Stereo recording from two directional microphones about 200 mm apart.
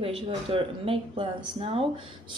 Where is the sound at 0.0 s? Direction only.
30° right (ahead or behind).